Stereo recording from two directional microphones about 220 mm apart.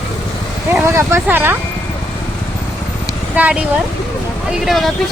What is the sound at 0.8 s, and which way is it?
Speech, 10° right (ahead or behind).